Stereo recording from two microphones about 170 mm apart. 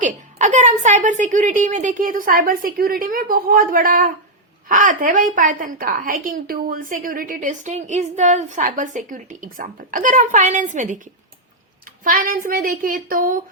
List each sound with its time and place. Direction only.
0.0 s a woman's voice: 45° right (ahead or behind)
12.0 s child singing: 55° right (ahead or behind)